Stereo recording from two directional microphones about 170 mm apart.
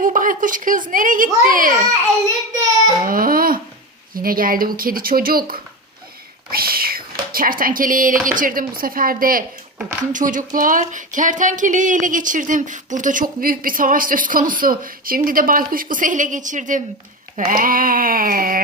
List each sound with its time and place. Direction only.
0.0 s speech: 50° right (ahead or behind)
3.0 s speech: 55° right (ahead or behind)